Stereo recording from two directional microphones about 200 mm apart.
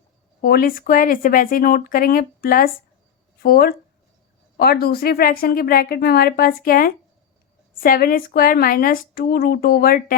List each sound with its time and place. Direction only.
0.4 s speech: 50° left (ahead or behind)